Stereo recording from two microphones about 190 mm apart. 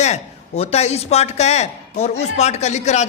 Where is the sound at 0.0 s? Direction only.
35° left (ahead or behind).